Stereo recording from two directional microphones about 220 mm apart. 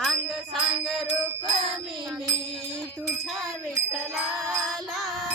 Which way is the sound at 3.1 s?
Centre (ahead or behind).